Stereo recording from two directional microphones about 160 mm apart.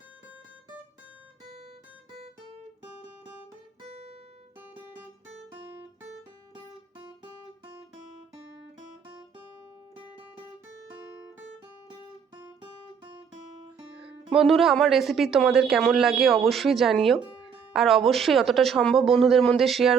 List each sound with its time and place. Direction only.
3.8 s music: 40° right (ahead or behind)
14.3 s speech: centre (ahead or behind)